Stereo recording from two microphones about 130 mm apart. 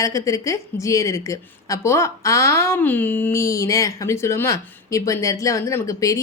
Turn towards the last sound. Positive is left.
turn(degrees=25)  # may be behind; listen again after turning